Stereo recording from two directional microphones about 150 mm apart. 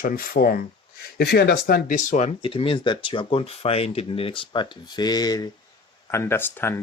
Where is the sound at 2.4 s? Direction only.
35° left (ahead or behind); by 6.8 s 15° left (ahead or behind).